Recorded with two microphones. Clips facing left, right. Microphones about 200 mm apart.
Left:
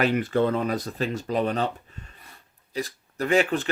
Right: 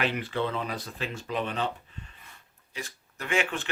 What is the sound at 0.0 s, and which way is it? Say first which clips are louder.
Speech: left 7 dB; 45° left (ahead or behind).